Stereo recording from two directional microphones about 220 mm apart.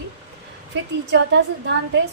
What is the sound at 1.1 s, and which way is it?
Speech, 50° right (ahead or behind).